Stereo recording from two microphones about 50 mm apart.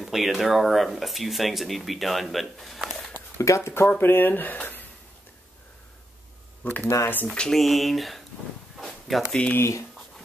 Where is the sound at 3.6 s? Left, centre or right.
Left.